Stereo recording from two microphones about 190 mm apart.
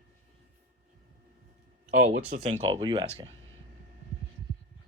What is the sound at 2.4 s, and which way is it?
Speech, 30° right (ahead or behind).